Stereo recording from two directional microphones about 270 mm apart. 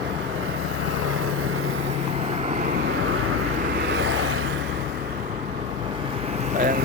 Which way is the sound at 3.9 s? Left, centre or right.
Right.